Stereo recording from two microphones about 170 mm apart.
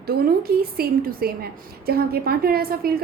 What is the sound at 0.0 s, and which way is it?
A woman's voice, 65° right (ahead or behind).